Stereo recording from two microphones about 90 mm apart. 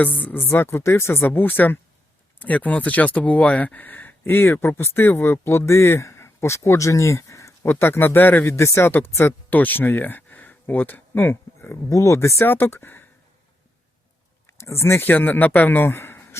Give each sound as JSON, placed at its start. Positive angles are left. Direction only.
{"t": 0.2, "sound": "speech", "side_deg": 20}
{"t": 7.7, "sound": "speech", "side_deg": 25}
{"t": 11.9, "sound": "speech", "side_deg": 35}
{"t": 14.6, "sound": "speech", "side_deg": 30}